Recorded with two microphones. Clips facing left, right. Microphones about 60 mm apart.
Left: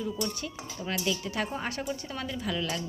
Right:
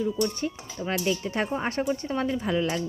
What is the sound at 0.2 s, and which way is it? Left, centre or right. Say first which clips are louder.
A woman's voice: right 6 dB; right.